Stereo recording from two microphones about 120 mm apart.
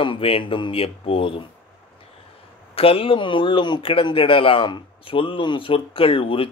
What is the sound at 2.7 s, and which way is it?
A man's voice, 55° left (ahead or behind).